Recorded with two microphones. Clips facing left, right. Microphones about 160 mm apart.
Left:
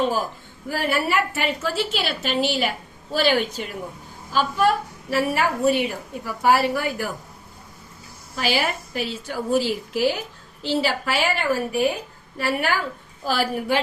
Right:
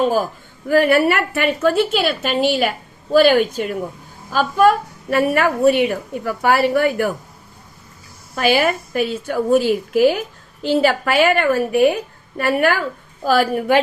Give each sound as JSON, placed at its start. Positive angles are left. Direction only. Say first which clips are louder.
{"t": 0.7, "sound": "a woman's voice", "louder": "right 9 dB", "side_deg": -60}
{"t": 8.4, "sound": "a woman's voice", "louder": "right 7 dB", "side_deg": -55}